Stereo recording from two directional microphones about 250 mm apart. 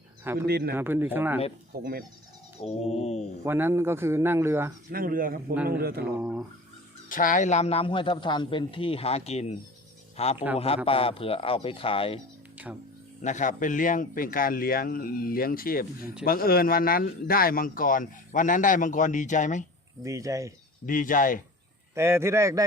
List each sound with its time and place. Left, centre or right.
0.4 s speech: right
0.7 s speech: centre
1.8 s speech: right
2.6 s speech: left
3.4 s speech: centre
4.9 s speech: right
6.1 s speech: centre
7.1 s speech: left
13.2 s speech: left
20.0 s speech: centre
20.8 s speech: left
21.9 s speech: centre